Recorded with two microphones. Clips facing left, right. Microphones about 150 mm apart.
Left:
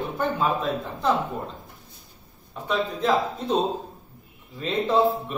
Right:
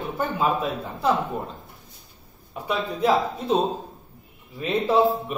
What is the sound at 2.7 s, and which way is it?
Speech, 10° right (ahead or behind).